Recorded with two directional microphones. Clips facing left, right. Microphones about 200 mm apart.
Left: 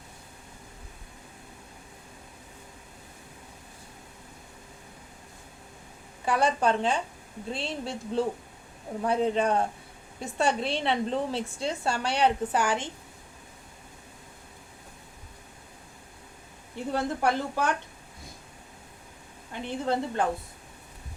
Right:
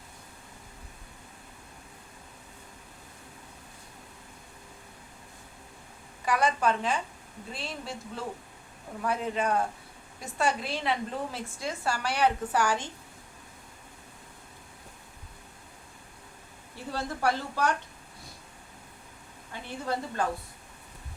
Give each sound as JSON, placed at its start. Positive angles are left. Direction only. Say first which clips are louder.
{"t": 6.2, "sound": "a woman's voice", "louder": "left 2 dB", "side_deg": 30}
{"t": 16.7, "sound": "a woman's voice", "louder": "left 5 dB", "side_deg": 20}
{"t": 19.6, "sound": "a woman's voice", "louder": "left 5 dB", "side_deg": 20}